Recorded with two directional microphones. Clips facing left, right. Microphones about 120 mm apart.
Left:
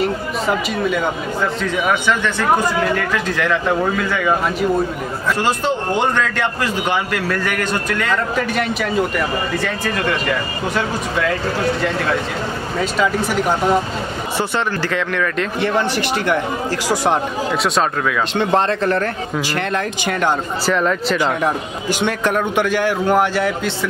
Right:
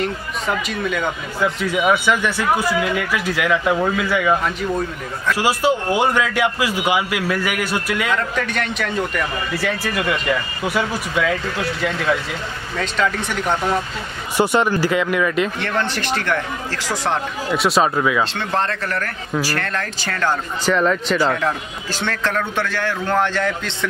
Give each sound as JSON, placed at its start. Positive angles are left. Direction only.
{"t": 0.0, "sound": "speech", "side_deg": 5}
{"t": 1.6, "sound": "a man's voice", "side_deg": -10}
{"t": 5.3, "sound": "a man's voice", "side_deg": -10}
{"t": 8.4, "sound": "speech", "side_deg": 5}
{"t": 9.7, "sound": "a man's voice", "side_deg": -5}
{"t": 12.7, "sound": "a man's voice", "side_deg": 5}
{"t": 14.3, "sound": "a man's voice", "side_deg": -15}
{"t": 15.6, "sound": "a man's voice", "side_deg": 10}
{"t": 17.5, "sound": "speech", "side_deg": 0}
{"t": 18.3, "sound": "speech", "side_deg": 20}
{"t": 20.6, "sound": "speech", "side_deg": 0}
{"t": 21.2, "sound": "a man's voice", "side_deg": 15}